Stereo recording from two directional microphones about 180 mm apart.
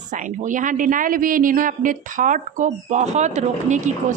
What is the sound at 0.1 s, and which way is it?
Speech, 45° right (ahead or behind).